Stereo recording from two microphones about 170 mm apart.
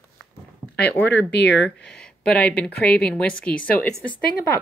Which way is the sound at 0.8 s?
80° left.